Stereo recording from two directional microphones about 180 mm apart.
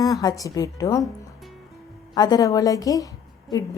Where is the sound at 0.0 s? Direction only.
20° left (ahead or behind).